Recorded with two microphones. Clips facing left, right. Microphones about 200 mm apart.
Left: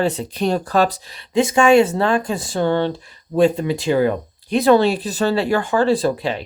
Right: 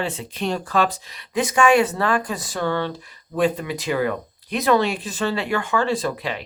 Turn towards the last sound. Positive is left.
turn(degrees=30)  # may be behind; listen again after turning